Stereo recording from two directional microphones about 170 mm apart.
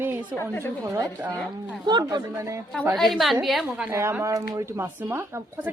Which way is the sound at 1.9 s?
25° right (ahead or behind).